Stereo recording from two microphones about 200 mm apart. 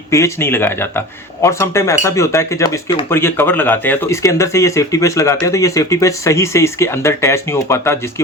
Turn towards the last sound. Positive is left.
turn(degrees=15)  # may be behind; listen again after turning